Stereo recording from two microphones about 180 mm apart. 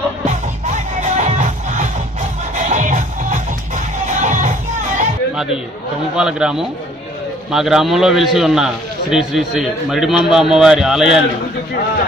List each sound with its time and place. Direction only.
1.0 s music: 40° right (ahead or behind)
6.1 s a man's voice: 5° right (ahead or behind)